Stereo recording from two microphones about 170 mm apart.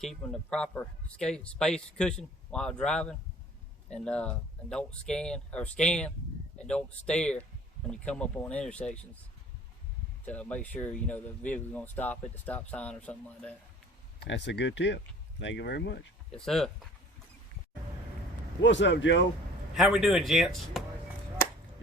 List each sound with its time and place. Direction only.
0.0 s speech: 5° left (ahead or behind)
10.2 s speech: 10° left (ahead or behind)
14.3 s speech: 90° left
16.3 s speech: 5° left (ahead or behind)
18.6 s speech: 90° left
19.7 s speech: centre (ahead or behind)